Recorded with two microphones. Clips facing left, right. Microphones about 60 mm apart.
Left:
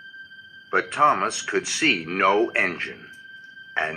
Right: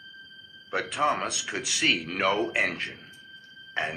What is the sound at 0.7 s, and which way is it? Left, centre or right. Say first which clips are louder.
Speech: left 7 dB; left.